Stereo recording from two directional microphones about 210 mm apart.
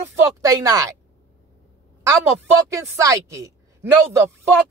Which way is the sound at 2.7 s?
15° right (ahead or behind).